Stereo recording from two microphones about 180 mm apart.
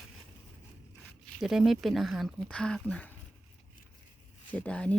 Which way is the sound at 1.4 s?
Centre (ahead or behind).